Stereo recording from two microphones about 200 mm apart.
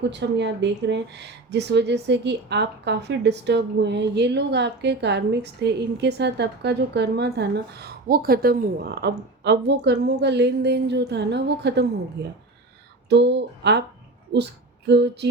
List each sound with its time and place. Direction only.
0.0 s speech: 60° right (ahead or behind)